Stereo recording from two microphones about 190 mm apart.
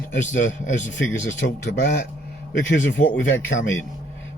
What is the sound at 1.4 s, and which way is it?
Speech, 60° left (ahead or behind).